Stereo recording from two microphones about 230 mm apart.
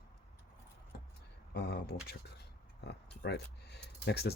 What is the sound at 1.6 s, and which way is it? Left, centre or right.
Speech, left.